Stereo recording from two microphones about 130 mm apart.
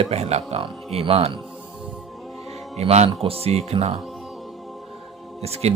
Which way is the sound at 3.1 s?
45° right (ahead or behind).